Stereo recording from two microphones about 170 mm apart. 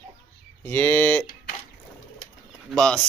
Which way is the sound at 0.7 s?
10° left (ahead or behind).